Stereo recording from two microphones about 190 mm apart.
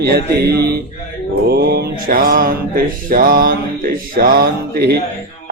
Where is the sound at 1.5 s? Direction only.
50° right (ahead or behind).